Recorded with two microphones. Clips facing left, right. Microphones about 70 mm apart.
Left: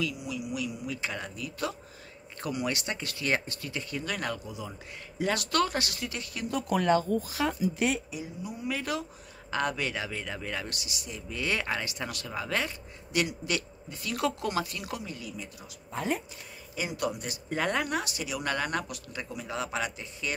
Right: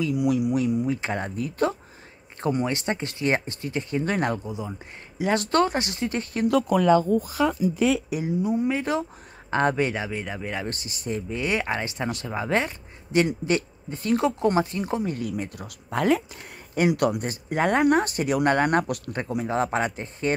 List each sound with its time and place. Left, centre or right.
0.1 s speech: right
8.1 s speech: right
8.6 s speech: right
10.7 s speech: right
11.3 s speech: right
15.1 s speech: right
16.7 s speech: right
17.6 s speech: right
17.8 s speech: right